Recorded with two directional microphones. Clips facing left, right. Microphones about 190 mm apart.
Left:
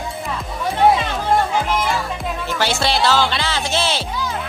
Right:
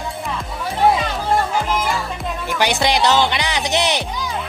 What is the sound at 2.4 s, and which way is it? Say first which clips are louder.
Speech: right 2 dB; 15° right (ahead or behind).